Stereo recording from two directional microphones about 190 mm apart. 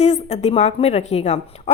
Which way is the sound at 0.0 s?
35° left (ahead or behind).